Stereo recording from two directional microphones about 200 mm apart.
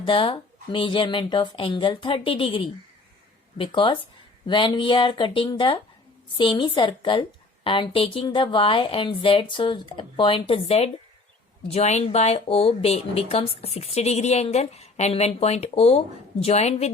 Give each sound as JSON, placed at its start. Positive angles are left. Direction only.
{"t": 0.0, "sound": "a woman's voice", "side_deg": 25}